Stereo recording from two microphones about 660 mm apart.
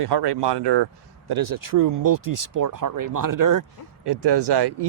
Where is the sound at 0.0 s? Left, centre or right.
Right.